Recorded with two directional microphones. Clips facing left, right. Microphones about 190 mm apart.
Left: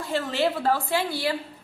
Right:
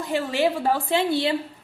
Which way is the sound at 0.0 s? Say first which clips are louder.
Right 2 dB; 15° right (ahead or behind).